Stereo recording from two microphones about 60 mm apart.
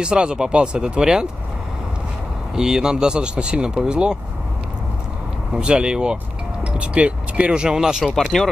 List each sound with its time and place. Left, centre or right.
0.0 s speech: centre
2.5 s speech: centre
5.5 s speech: centre
8.1 s speech: centre